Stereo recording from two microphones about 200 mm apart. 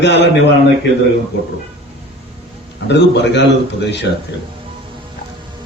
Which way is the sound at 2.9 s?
60° left (ahead or behind).